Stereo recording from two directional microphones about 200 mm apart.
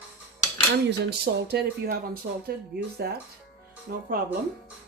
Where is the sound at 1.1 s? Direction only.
55° right (ahead or behind).